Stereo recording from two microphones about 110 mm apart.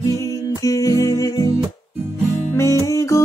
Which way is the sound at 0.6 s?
30° left (ahead or behind).